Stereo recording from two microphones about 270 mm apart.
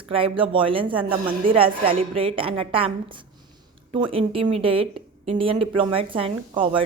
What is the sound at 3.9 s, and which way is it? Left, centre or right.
A woman's voice, centre.